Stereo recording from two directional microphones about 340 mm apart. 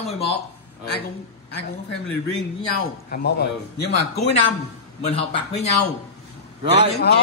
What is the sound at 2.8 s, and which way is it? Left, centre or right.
Speech, left.